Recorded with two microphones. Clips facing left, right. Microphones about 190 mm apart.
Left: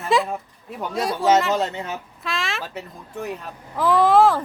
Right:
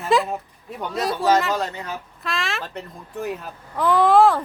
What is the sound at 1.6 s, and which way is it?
Speech, 25° left (ahead or behind).